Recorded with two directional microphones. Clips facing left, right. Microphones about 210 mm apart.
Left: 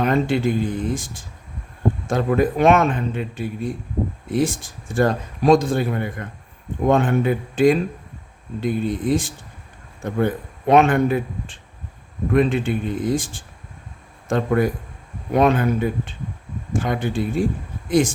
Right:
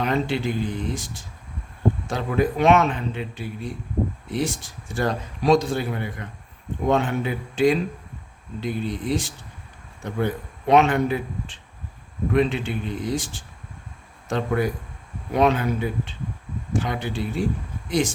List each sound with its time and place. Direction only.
0.0 s speech: 50° left (ahead or behind)